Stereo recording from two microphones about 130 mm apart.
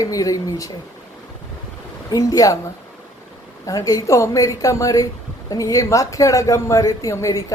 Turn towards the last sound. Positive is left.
turn(degrees=25)  # may be behind; listen again after turning